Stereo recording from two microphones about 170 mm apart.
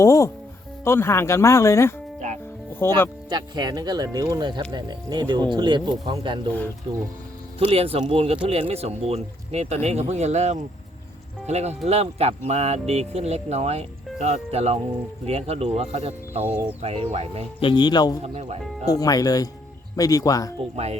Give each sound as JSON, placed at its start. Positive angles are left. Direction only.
{"t": 0.0, "sound": "speech", "side_deg": 20}
{"t": 3.2, "sound": "speech", "side_deg": -25}
{"t": 17.6, "sound": "speech", "side_deg": 30}
{"t": 18.2, "sound": "speech", "side_deg": -40}
{"t": 18.9, "sound": "speech", "side_deg": 20}
{"t": 20.6, "sound": "speech", "side_deg": -35}